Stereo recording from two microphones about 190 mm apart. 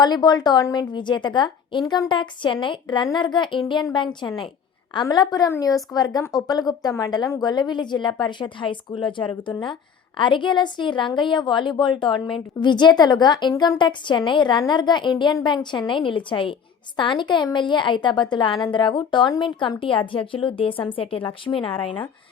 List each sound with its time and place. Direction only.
0.0 s a woman's voice: 20° left (ahead or behind)